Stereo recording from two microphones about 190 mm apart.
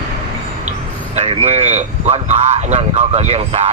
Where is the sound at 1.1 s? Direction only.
35° right (ahead or behind).